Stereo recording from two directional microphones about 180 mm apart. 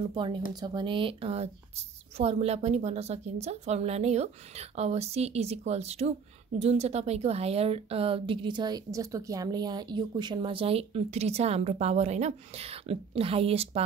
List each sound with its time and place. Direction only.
0.1 s speech: 25° right (ahead or behind)